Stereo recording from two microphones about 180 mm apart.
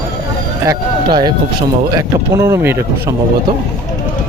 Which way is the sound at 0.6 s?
25° right (ahead or behind).